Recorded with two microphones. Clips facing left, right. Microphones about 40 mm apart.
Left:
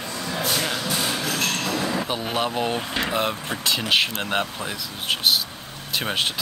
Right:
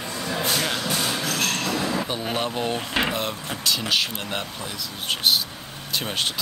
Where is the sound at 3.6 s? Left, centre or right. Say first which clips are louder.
Left 2 dB; left.